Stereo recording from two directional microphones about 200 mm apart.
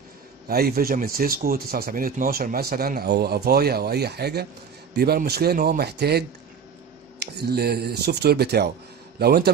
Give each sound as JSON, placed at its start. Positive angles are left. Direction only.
{"t": 0.5, "sound": "a man's voice", "side_deg": -50}